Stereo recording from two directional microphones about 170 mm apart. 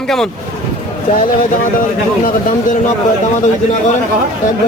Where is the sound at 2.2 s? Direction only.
50° left (ahead or behind).